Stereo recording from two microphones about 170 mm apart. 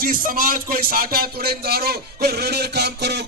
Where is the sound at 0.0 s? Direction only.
55° right (ahead or behind).